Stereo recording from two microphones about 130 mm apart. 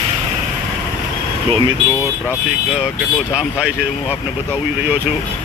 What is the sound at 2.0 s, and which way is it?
Speech, 20° left (ahead or behind).